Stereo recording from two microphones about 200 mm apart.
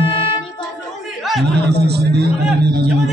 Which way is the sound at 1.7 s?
55° right (ahead or behind).